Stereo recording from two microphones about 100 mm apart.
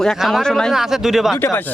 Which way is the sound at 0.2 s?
Centre (ahead or behind).